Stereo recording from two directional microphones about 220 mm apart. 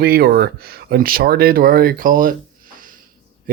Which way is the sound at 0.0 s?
45° right (ahead or behind).